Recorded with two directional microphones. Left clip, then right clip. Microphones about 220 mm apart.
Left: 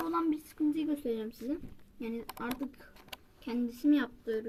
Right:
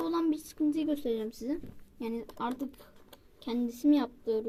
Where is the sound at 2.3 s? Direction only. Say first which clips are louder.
Right 3 dB; 20° left (ahead or behind).